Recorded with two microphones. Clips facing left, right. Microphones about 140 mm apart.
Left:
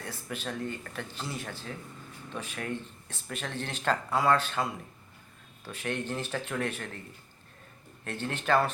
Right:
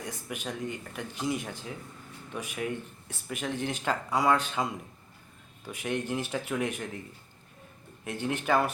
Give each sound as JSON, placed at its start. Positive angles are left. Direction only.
{"t": 0.0, "sound": "speech", "side_deg": -15}
{"t": 8.0, "sound": "speech", "side_deg": -15}